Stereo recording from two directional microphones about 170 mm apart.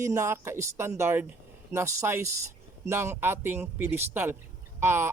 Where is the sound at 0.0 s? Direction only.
15° right (ahead or behind).